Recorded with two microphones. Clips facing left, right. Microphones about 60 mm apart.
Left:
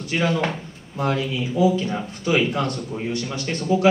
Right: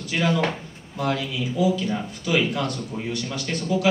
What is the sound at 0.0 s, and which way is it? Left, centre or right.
Speech, left.